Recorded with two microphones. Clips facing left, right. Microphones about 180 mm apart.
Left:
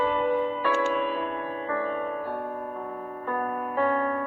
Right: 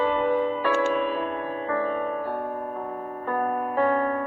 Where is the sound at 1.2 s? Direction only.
45° right (ahead or behind).